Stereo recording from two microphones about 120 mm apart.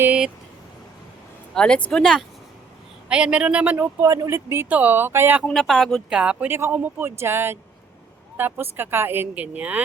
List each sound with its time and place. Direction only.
0.0 s vehicle: 10° right (ahead or behind)
1.5 s speech: 5° left (ahead or behind)
3.1 s speech: 10° right (ahead or behind)
4.0 s speech: 25° right (ahead or behind)
5.5 s speech: centre (ahead or behind)